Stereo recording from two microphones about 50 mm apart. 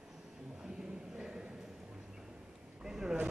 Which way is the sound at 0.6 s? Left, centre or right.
Centre.